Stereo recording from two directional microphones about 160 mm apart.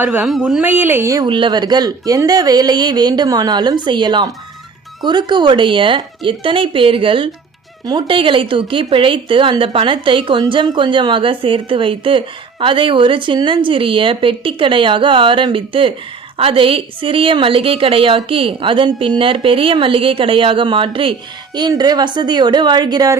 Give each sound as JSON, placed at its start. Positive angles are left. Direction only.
{"t": 0.0, "sound": "speech", "side_deg": -10}
{"t": 0.3, "sound": "speech", "side_deg": 0}
{"t": 0.6, "sound": "speech", "side_deg": -10}